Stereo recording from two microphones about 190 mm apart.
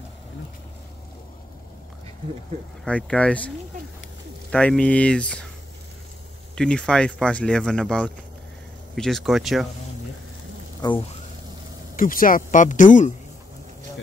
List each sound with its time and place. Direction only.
2.8 s speech: 5° left (ahead or behind)
6.5 s speech: 5° left (ahead or behind)
10.8 s speech: 20° left (ahead or behind)
12.0 s speech: 45° left (ahead or behind)